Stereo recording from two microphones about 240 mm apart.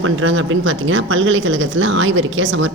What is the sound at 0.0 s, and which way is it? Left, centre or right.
Speech, right.